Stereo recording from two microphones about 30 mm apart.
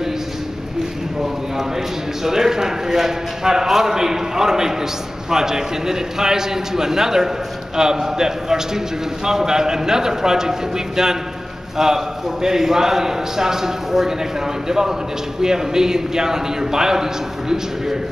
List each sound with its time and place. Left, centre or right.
2.2 s a man's voice: centre
11.8 s a man's voice: centre